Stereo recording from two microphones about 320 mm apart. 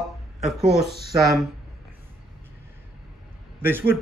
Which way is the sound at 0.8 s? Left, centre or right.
Right.